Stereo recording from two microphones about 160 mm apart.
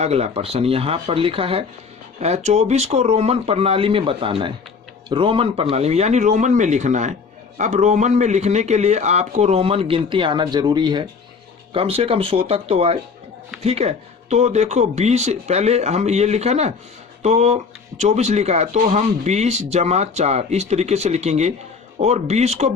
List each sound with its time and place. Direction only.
0.0 s speech: 40° right (ahead or behind)